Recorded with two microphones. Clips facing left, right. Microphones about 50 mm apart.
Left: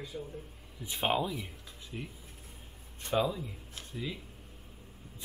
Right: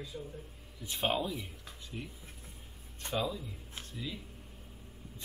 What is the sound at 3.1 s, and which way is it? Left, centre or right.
Speech, centre.